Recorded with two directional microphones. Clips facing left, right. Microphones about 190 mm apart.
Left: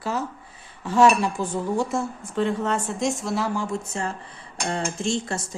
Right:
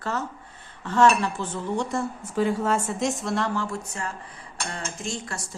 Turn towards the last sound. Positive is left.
turn(degrees=25)  # may be behind; listen again after turning